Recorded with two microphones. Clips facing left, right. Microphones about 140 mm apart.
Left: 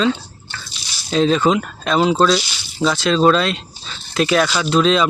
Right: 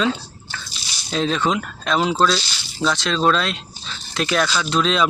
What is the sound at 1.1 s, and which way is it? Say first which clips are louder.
Speech: left 5 dB; centre (ahead or behind).